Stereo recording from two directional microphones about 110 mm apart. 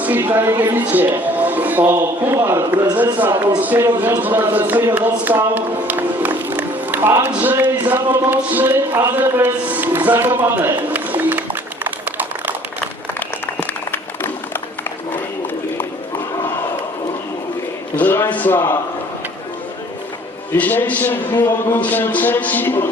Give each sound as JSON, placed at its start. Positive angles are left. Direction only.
{"t": 0.0, "sound": "a man's voice", "side_deg": -15}
{"t": 13.1, "sound": "applause", "side_deg": 15}
{"t": 17.9, "sound": "speech", "side_deg": 20}
{"t": 20.6, "sound": "speech", "side_deg": 15}